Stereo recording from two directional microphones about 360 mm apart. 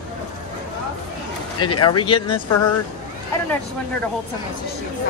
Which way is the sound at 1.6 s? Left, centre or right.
Left.